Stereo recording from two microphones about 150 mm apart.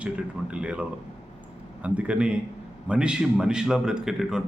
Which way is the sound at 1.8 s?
10° right (ahead or behind).